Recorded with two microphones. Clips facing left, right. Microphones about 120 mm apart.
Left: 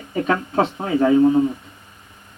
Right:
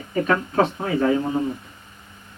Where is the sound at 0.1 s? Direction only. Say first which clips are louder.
Even; 25° left (ahead or behind).